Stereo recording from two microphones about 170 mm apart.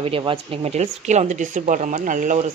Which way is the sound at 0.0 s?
30° right (ahead or behind).